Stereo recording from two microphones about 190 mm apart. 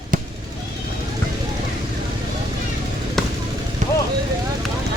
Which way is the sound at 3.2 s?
Centre (ahead or behind).